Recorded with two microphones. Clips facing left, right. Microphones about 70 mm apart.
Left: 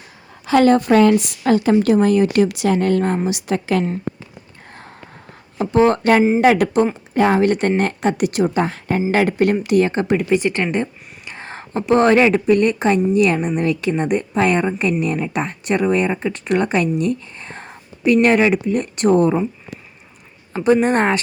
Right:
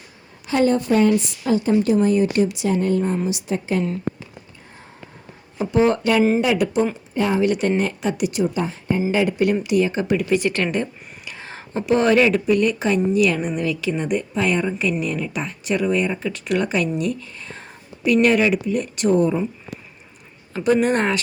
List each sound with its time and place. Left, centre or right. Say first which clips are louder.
0.4 s a woman's voice: left 5 dB; left
1.2 s a woman's voice: left 4 dB; left
5.5 s speech: left 3 dB; left
7.1 s speech: left 6 dB; left
9.1 s speech: left 4 dB; left
10.2 s speech: left 2 dB; left
11.3 s a woman's voice: left 4 dB; left
20.8 s a woman's voice: left 3 dB; left